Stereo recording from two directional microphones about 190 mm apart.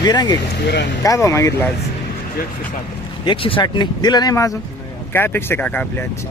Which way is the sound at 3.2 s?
25° left (ahead or behind).